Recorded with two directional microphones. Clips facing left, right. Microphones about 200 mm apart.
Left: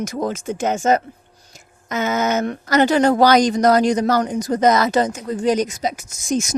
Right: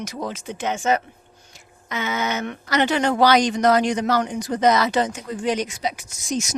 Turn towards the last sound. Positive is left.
turn(degrees=50)  # may be behind; listen again after turning